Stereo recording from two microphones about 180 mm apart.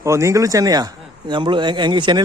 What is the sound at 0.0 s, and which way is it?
A man's voice, 15° right (ahead or behind).